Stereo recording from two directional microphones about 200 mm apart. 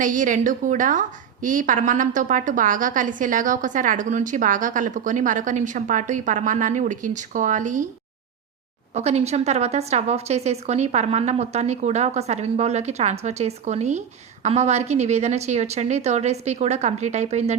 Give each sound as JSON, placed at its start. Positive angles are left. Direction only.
{"t": 0.0, "sound": "a woman's voice", "side_deg": -40}
{"t": 9.0, "sound": "a woman's voice", "side_deg": -35}